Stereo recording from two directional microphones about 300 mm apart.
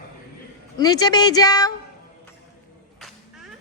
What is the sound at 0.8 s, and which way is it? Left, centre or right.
Music, centre.